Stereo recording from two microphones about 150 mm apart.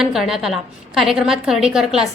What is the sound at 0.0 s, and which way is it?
A woman's voice, 5° right (ahead or behind).